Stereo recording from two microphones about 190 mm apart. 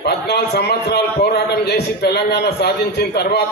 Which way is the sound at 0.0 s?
60° left (ahead or behind).